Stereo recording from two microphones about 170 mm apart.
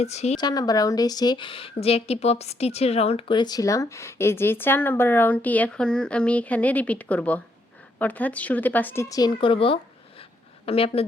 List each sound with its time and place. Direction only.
0.0 s a woman's voice: 40° left (ahead or behind)
0.3 s a woman's voice: 25° left (ahead or behind)